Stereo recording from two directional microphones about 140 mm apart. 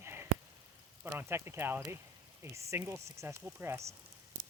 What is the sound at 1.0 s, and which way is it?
Speech, 15° right (ahead or behind).